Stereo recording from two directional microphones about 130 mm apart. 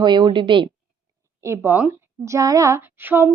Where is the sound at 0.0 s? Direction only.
35° right (ahead or behind).